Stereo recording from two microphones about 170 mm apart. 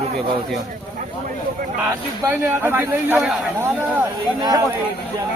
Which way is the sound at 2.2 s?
10° right (ahead or behind).